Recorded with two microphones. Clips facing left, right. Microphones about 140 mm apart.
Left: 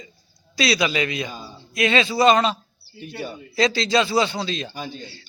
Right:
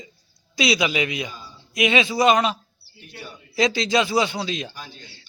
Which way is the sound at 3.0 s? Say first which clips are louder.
Left 9 dB; 75° left (ahead or behind).